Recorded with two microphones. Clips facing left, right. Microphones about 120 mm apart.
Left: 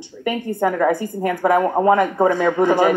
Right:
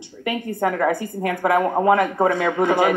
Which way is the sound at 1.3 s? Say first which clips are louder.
Left 2 dB; 5° right (ahead or behind).